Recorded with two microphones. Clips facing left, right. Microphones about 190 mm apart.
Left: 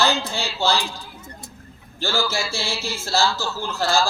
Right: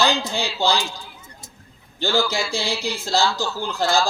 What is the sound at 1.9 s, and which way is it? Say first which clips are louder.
A man's voice: right 3 dB; 15° right (ahead or behind).